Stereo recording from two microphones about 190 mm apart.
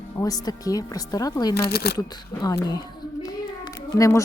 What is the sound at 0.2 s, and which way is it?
Speech, 20° left (ahead or behind).